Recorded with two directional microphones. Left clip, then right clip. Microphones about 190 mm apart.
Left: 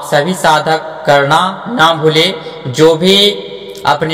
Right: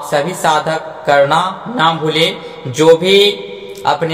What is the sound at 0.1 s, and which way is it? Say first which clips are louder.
A man's voice: left 3 dB; 35° left (ahead or behind).